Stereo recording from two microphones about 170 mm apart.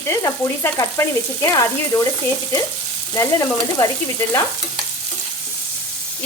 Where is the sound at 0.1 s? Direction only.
15° left (ahead or behind).